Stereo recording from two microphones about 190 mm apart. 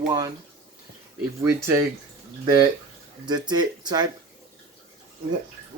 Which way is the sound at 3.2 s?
20° right (ahead or behind).